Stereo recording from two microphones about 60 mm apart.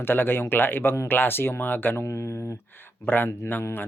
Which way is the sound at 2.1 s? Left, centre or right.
Left.